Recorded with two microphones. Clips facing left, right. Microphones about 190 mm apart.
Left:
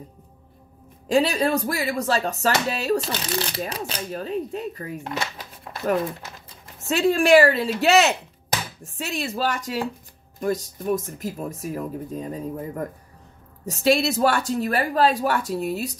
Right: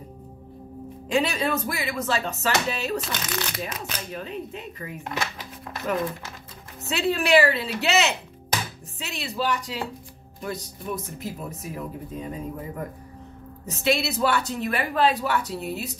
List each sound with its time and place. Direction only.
1.0 s a woman's voice: 40° left (ahead or behind)
3.1 s a woman's voice: 30° left (ahead or behind)
6.9 s a woman's voice: 40° left (ahead or behind)